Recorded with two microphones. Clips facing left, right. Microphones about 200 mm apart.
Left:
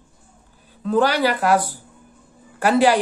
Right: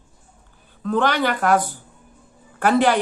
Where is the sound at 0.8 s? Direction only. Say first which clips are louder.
Left 2 dB; 35° left (ahead or behind).